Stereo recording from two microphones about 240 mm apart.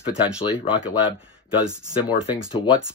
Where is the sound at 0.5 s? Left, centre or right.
Centre.